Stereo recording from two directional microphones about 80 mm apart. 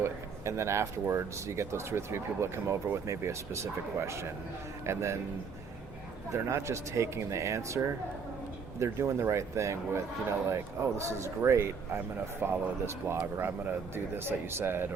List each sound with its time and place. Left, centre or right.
0.0 s speech: right
6.3 s speech: right
8.8 s speech: right